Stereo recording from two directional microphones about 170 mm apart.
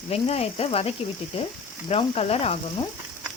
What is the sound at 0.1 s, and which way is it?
A woman's voice, 35° left (ahead or behind).